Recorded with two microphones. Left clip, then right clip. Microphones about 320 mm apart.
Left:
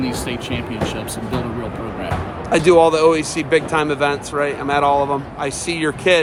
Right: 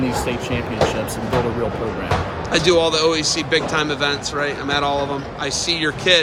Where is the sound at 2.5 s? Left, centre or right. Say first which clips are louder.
Left 4 dB; centre.